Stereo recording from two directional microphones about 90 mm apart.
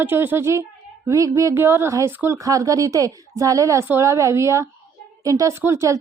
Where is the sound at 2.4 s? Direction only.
40° right (ahead or behind).